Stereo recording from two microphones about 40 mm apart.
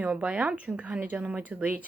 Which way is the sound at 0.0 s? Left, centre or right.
Right.